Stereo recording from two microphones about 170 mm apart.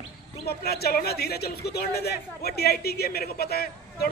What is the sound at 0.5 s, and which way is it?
Speech, 70° left (ahead or behind).